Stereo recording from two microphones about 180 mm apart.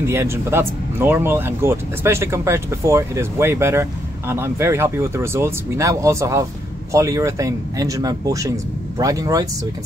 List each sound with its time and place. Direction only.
0.0 s speech: 15° right (ahead or behind)